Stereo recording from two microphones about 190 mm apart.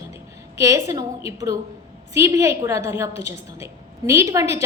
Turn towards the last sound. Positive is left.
turn(degrees=-15)  # may be behind; listen again after turning